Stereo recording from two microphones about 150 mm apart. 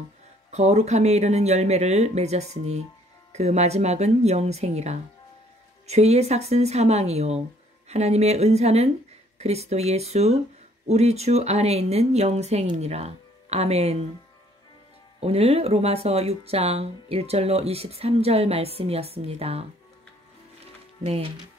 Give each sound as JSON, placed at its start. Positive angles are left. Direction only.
{"t": 0.5, "sound": "speech", "side_deg": -45}
{"t": 15.1, "sound": "speech", "side_deg": -40}
{"t": 21.0, "sound": "speech", "side_deg": -40}